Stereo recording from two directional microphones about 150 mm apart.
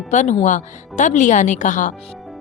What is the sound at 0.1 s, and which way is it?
A woman's voice, 50° left (ahead or behind).